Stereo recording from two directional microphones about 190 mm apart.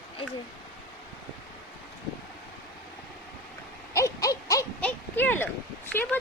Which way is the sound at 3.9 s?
15° left (ahead or behind).